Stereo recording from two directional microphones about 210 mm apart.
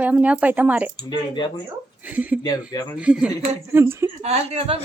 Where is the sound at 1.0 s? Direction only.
20° left (ahead or behind).